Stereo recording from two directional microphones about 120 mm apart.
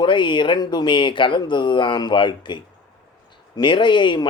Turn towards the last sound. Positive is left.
turn(degrees=40)  # may be behind; listen again after turning